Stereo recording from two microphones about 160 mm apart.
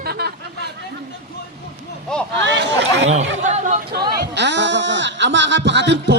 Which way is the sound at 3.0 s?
45° right (ahead or behind).